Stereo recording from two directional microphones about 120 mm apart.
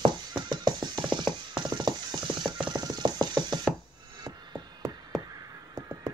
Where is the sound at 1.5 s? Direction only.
35° right (ahead or behind).